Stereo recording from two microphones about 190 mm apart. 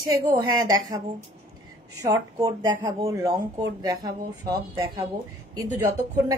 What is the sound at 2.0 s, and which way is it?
A woman's voice, 20° right (ahead or behind).